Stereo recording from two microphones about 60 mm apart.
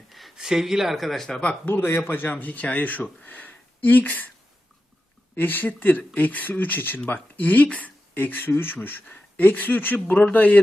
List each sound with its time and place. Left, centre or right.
0.1 s a sound: centre
0.3 s speech: centre
1.6 s speech: left
5.3 s speech: left